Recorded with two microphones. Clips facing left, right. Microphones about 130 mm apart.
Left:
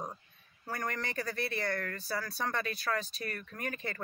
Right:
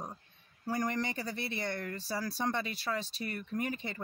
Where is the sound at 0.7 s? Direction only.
20° right (ahead or behind).